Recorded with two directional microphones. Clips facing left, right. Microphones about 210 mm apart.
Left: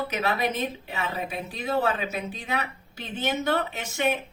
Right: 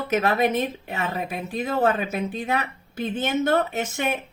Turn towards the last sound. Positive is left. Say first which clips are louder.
# right 1 dB
turn(degrees=-50)  # may be behind; listen again after turning